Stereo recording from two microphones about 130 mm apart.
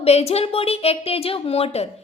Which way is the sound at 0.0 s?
55° left (ahead or behind).